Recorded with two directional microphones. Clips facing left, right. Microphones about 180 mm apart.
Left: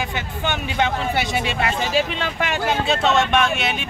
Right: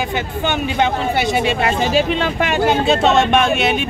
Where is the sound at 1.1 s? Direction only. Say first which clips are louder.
Right 5 dB; 35° right (ahead or behind).